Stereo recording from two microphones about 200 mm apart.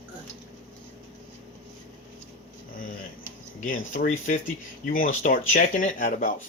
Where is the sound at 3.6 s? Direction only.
40° left (ahead or behind).